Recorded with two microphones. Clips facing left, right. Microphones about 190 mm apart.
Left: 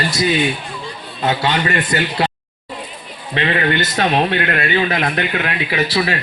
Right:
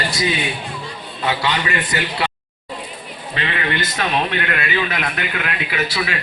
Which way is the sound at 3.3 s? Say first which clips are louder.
Left 6 dB; 35° left (ahead or behind).